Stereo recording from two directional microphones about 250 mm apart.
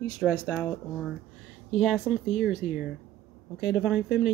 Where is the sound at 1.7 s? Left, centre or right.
Centre.